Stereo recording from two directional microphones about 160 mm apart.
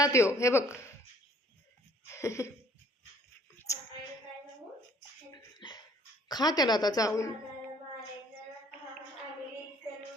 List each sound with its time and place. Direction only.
0.0 s a woman's voice: 20° left (ahead or behind)
2.0 s a sound: 15° left (ahead or behind)
5.3 s bathtub: 25° left (ahead or behind)
6.2 s a woman's voice: 25° left (ahead or behind)